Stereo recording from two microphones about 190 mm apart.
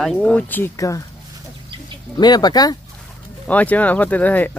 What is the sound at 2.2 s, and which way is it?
Speech, 20° left (ahead or behind).